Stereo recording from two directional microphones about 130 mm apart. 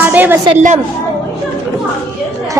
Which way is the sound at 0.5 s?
65° right (ahead or behind).